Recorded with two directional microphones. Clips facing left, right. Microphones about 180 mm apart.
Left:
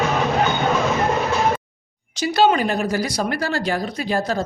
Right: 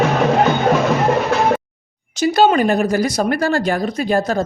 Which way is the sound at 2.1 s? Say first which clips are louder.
Right 4 dB; 45° right (ahead or behind).